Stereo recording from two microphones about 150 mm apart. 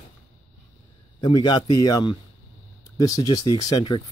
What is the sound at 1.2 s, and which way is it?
Speech, 30° left (ahead or behind).